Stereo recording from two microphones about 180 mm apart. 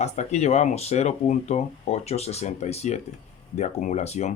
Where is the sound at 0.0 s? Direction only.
40° left (ahead or behind).